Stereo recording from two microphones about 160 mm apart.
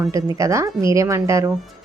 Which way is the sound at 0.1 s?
20° right (ahead or behind).